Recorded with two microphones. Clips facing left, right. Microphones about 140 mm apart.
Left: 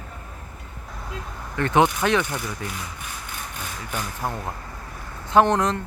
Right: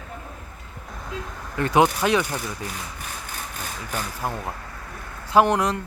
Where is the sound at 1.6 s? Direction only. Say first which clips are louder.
Even; 10° right (ahead or behind).